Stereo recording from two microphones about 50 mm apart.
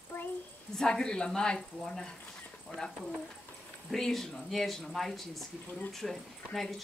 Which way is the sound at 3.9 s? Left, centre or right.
Centre.